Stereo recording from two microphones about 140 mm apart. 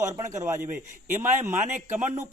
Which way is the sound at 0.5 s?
65° right (ahead or behind).